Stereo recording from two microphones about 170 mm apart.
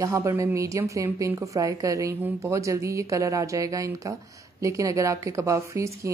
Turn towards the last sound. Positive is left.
turn(degrees=-15)  # may be behind; listen again after turning